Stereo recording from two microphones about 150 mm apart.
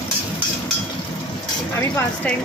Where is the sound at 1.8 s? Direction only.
15° left (ahead or behind).